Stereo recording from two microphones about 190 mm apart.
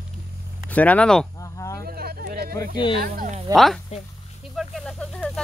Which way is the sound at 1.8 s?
55° right (ahead or behind).